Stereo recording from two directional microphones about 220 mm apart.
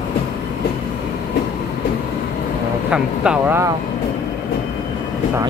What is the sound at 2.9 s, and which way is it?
Speech, 5° right (ahead or behind).